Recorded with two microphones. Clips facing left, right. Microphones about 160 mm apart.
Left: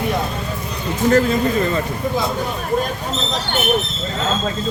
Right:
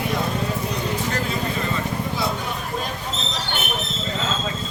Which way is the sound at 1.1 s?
45° left (ahead or behind).